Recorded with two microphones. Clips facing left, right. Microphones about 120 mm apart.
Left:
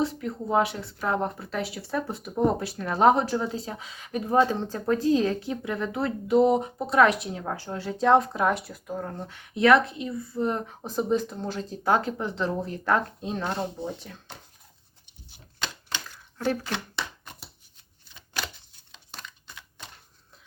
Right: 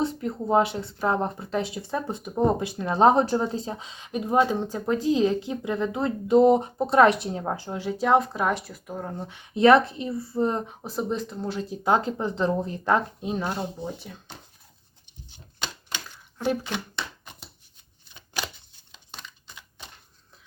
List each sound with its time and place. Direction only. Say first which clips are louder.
0.0 s speech: right 1 dB; 30° right (ahead or behind)
9.6 s speech: right 2 dB; 30° right (ahead or behind)
10.8 s speech: left 5 dB; centre (ahead or behind)
11.8 s speech: right 1 dB; 20° right (ahead or behind)
16.0 s a sound: right 1 dB; 15° right (ahead or behind)